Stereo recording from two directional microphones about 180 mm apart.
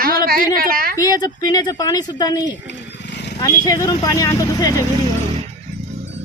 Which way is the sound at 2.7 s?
70° left (ahead or behind).